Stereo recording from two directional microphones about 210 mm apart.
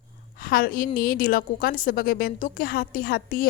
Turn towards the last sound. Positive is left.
turn(degrees=45)  # may be behind; listen again after turning